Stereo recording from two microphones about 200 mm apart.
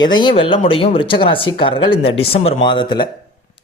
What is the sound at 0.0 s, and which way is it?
Speech, 20° left (ahead or behind).